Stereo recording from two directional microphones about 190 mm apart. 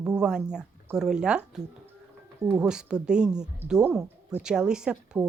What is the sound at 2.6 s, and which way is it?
Speech, 5° right (ahead or behind).